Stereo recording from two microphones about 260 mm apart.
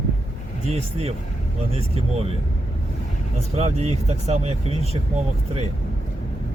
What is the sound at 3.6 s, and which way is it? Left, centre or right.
Speech, right.